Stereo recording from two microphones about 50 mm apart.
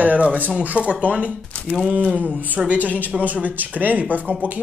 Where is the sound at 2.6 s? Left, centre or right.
Centre.